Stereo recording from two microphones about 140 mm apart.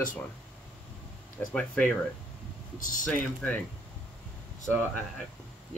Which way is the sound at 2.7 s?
70° left (ahead or behind).